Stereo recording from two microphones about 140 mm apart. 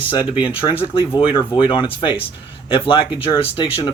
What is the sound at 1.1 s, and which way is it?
Speech, 35° left (ahead or behind).